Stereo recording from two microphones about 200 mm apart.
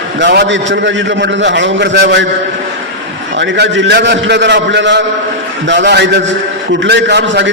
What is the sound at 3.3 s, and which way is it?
A man's voice, 60° right (ahead or behind).